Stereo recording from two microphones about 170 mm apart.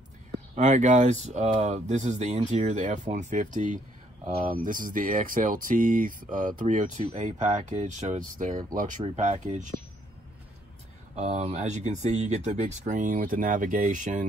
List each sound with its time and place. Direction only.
0.6 s speech: 45° right (ahead or behind)
11.1 s speech: 40° right (ahead or behind)